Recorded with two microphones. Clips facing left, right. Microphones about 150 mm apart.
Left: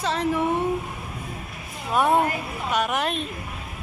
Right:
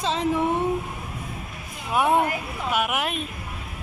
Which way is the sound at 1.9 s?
15° right (ahead or behind).